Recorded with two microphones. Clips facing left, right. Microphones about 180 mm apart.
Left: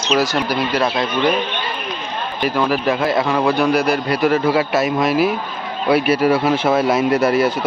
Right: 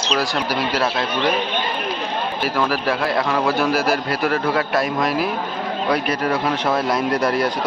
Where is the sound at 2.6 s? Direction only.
20° left (ahead or behind).